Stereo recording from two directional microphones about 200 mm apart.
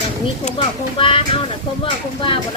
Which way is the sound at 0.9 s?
25° left (ahead or behind).